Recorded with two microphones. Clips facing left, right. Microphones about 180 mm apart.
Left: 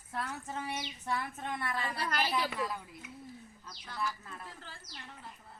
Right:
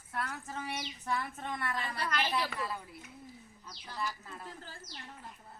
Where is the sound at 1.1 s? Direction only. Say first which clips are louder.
Even; 10° left (ahead or behind).